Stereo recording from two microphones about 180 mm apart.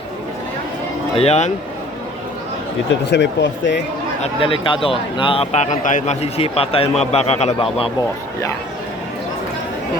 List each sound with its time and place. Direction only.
1.1 s speech: 35° left (ahead or behind)
3.1 s speech: 75° left (ahead or behind)
4.2 s speech: 30° left (ahead or behind)